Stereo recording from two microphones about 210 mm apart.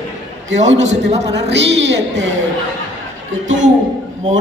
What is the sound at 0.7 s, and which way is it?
A woman's voice, 60° right (ahead or behind).